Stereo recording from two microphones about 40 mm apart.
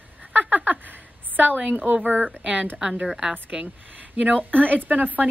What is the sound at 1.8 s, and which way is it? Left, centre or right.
Speech, right.